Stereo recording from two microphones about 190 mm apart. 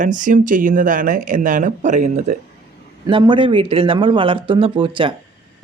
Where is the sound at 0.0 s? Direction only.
45° right (ahead or behind).